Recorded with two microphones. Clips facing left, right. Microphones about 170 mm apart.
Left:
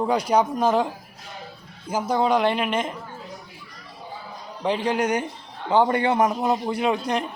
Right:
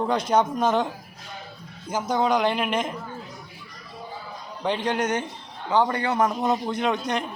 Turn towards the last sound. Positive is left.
turn(degrees=5)  # may be behind; listen again after turning